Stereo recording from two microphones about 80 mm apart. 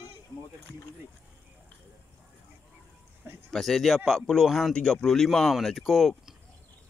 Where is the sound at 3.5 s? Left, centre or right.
Centre.